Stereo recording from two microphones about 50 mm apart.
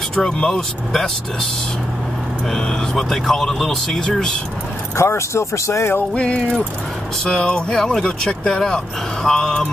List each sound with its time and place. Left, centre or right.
0.1 s speech: centre
2.5 s speech: centre
4.9 s speech: left
6.1 s a sound: centre
7.2 s speech: centre